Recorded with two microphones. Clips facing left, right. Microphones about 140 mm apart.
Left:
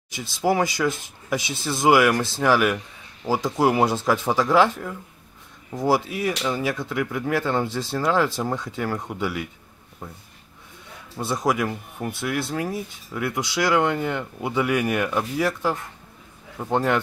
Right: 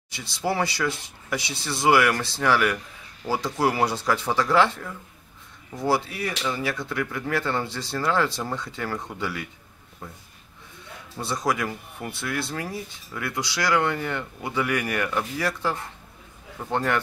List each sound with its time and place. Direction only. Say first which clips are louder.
0.1 s speech: left 5 dB; 15° left (ahead or behind)
11.1 s speech: left 3 dB; 20° left (ahead or behind)